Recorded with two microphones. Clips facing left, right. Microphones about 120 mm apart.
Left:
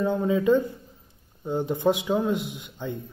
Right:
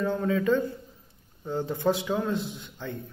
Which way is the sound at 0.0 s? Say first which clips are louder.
Left 3 dB; 15° left (ahead or behind).